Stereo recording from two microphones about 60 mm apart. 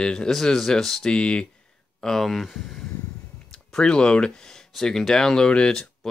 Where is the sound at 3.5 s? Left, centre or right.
Centre.